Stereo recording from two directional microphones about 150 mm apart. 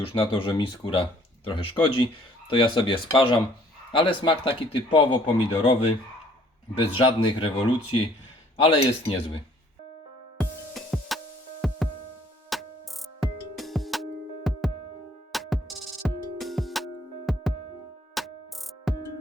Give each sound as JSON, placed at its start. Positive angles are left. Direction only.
{"t": 0.0, "sound": "speech", "side_deg": 35}
{"t": 6.7, "sound": "speech", "side_deg": 35}
{"t": 10.8, "sound": "music", "side_deg": 0}